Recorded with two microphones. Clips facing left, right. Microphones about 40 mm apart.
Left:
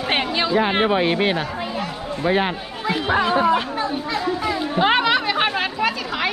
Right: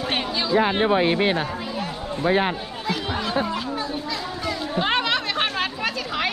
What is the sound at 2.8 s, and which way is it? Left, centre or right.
A child's voice, left.